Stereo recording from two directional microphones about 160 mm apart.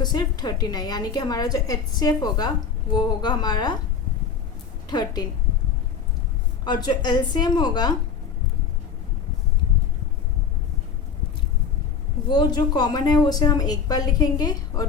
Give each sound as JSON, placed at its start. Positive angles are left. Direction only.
{"t": 0.0, "sound": "a woman's voice", "side_deg": 25}
{"t": 4.9, "sound": "a woman's voice", "side_deg": 25}
{"t": 6.7, "sound": "a woman's voice", "side_deg": 25}
{"t": 12.3, "sound": "a woman's voice", "side_deg": 25}